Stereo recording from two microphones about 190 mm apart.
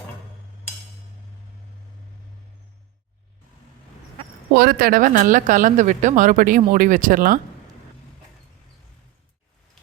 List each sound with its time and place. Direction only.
4.5 s speech: 55° right (ahead or behind)